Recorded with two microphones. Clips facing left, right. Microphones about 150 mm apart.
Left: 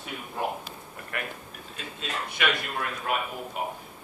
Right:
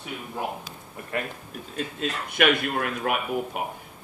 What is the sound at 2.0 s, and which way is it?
A man's voice, 55° right (ahead or behind).